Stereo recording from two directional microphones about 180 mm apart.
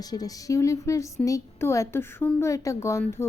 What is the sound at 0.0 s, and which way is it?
A woman's voice, 20° left (ahead or behind).